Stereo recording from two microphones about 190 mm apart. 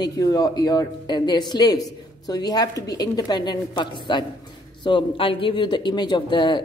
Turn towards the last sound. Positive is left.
turn(degrees=25)  # may be behind; listen again after turning